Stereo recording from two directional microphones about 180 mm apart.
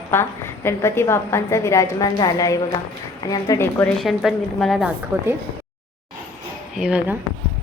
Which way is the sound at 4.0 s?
Centre (ahead or behind).